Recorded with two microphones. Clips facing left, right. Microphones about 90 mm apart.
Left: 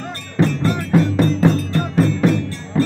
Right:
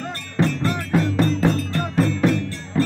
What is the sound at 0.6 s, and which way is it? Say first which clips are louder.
Music: left 4 dB; 10° left (ahead or behind).